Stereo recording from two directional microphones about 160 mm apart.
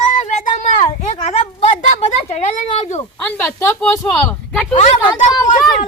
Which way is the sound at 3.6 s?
15° left (ahead or behind).